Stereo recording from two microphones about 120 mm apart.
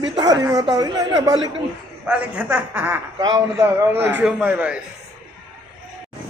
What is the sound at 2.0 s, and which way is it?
A man's voice, 10° right (ahead or behind).